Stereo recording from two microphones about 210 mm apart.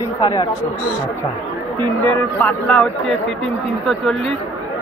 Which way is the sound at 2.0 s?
10° left (ahead or behind).